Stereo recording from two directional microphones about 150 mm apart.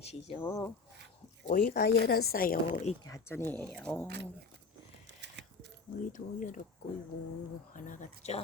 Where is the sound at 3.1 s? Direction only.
15° left (ahead or behind).